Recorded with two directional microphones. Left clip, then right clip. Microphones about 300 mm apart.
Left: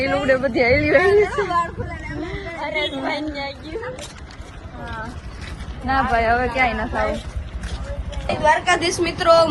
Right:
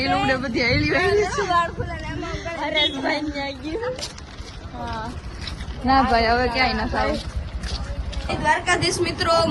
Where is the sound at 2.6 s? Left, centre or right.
Right.